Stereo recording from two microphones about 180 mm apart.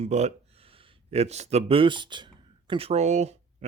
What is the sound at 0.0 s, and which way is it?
Speech, 40° right (ahead or behind).